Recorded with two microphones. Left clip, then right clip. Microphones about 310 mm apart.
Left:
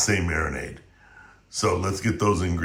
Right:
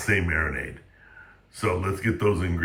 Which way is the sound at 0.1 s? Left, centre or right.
Centre.